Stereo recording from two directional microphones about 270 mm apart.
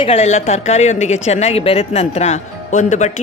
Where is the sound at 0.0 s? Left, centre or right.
Left.